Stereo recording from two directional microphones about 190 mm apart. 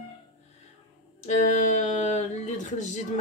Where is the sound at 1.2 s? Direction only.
40° left (ahead or behind).